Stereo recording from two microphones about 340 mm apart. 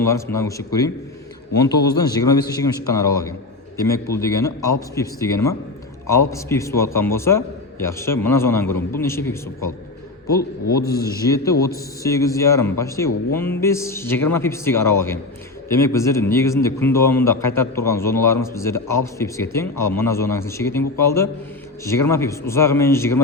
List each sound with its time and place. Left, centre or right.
0.0 s a man's voice: centre
10.2 s a man's voice: left
10.8 s a man's voice: centre